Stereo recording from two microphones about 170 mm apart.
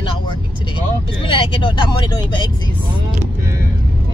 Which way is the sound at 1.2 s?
30° left (ahead or behind).